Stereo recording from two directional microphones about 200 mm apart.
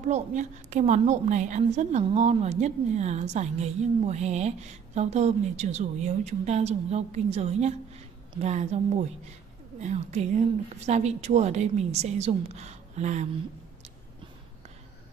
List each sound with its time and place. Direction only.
0.0 s a woman's voice: 35° right (ahead or behind)